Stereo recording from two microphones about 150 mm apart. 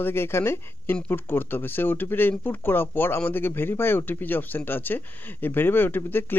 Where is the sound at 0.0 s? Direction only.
15° left (ahead or behind).